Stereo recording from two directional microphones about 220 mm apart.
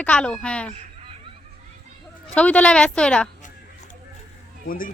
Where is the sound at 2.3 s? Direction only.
5° left (ahead or behind).